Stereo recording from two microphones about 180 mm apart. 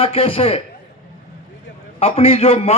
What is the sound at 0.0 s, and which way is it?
Speech, 30° left (ahead or behind).